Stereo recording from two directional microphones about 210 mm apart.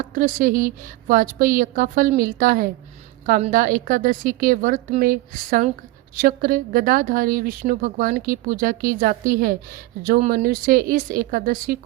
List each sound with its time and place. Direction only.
0.1 s a woman's voice: 40° right (ahead or behind)